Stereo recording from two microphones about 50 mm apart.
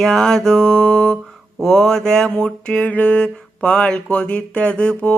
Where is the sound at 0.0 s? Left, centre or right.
Centre.